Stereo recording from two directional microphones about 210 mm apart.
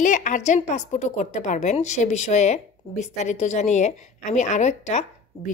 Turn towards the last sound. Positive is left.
turn(degrees=30)  # may be behind; listen again after turning